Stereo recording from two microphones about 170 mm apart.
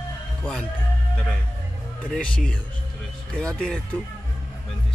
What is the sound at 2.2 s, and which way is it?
Speech, 5° left (ahead or behind).